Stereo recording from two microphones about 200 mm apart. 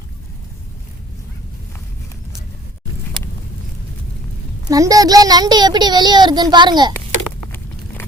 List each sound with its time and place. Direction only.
4.7 s a child's voice: 15° right (ahead or behind)